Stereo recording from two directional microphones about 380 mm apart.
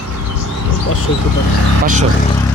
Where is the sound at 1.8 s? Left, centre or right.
Centre.